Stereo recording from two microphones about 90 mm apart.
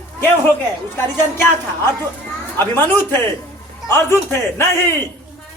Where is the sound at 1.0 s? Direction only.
25° left (ahead or behind).